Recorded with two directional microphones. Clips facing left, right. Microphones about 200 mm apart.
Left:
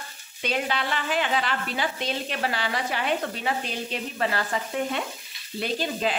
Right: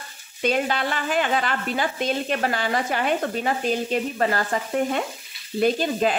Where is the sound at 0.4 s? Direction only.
45° right (ahead or behind).